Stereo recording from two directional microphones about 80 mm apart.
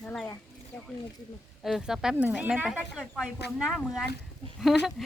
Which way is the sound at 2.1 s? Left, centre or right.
Centre.